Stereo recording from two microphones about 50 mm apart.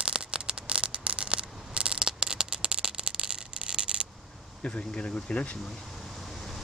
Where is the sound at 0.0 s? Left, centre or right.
Centre.